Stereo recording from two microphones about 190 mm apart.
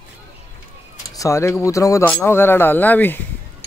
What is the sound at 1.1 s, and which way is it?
Speech, 15° left (ahead or behind).